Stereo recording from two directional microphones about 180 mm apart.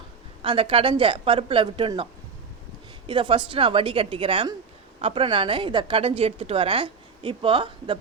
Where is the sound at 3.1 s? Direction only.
30° right (ahead or behind).